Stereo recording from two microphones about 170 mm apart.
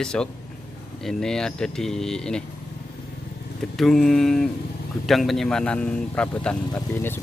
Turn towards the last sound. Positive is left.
turn(degrees=15)  # may be behind; listen again after turning